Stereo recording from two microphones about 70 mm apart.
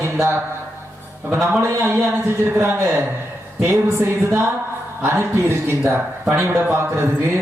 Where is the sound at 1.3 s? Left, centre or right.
Right.